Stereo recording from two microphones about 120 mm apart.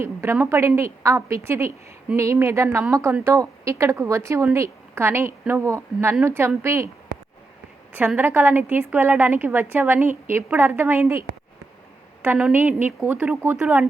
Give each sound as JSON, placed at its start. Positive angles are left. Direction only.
{"t": 0.0, "sound": "a woman's voice", "side_deg": -20}
{"t": 7.9, "sound": "a woman's voice", "side_deg": -15}
{"t": 12.2, "sound": "a woman's voice", "side_deg": -15}